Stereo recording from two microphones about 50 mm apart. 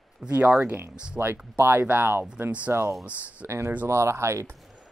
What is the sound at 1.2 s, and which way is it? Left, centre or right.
Speech, right.